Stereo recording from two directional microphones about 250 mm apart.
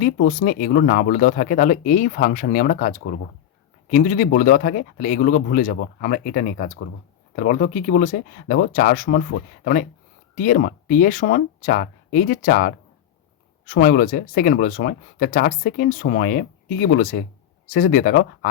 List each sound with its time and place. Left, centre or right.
0.0 s speech: left
10.3 s speech: left